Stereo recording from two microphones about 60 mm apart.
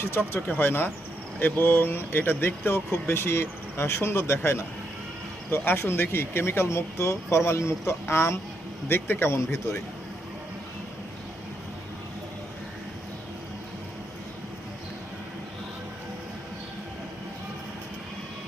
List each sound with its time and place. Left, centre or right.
0.0 s speech: left